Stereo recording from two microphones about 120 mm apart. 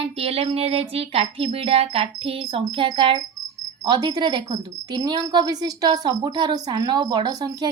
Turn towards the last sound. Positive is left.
turn(degrees=-35)  # may be behind; listen again after turning